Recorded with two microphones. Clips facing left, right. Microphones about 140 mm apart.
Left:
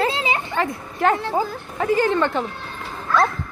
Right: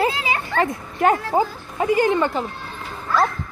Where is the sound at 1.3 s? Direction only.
15° right (ahead or behind).